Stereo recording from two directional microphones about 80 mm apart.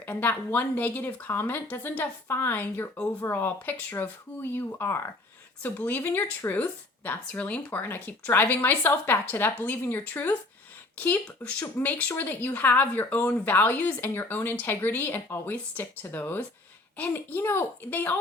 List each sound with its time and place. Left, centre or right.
0.0 s speech: left